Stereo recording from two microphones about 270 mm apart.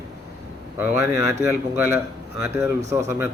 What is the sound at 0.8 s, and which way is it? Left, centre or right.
Speech, centre.